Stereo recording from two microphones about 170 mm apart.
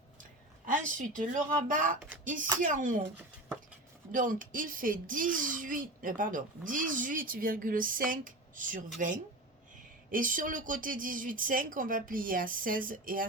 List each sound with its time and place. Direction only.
0.6 s speech: 50° right (ahead or behind)
4.1 s speech: 55° right (ahead or behind)